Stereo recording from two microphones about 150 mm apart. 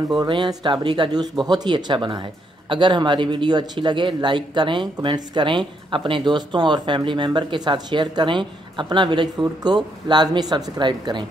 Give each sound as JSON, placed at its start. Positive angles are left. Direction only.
{"t": 0.1, "sound": "speech", "side_deg": -25}